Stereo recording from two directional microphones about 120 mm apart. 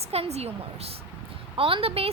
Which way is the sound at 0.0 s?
60° right (ahead or behind).